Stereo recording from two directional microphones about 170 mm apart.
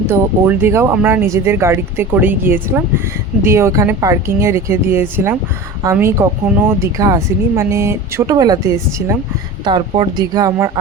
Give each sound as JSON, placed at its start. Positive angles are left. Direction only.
{"t": 0.1, "sound": "speech", "side_deg": -15}
{"t": 9.6, "sound": "speech", "side_deg": -30}